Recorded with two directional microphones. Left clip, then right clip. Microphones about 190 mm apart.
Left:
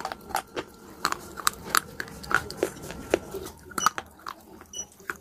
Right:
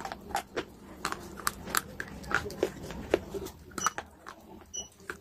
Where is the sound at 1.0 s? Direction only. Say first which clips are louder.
Left 7 dB; 20° left (ahead or behind).